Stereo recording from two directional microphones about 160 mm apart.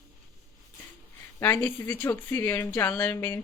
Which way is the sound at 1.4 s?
15° left (ahead or behind).